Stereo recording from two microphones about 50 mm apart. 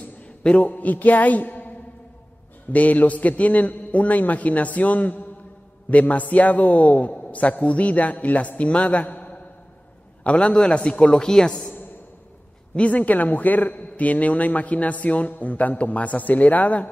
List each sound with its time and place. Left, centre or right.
0.0 s a sound: left
0.6 s a man's voice: left
2.7 s a man's voice: left
10.2 s a man's voice: left
12.7 s a man's voice: left